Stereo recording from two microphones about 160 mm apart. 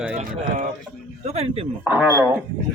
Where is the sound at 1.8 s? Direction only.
10° right (ahead or behind).